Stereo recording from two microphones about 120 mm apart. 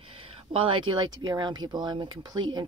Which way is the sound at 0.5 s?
45° right (ahead or behind).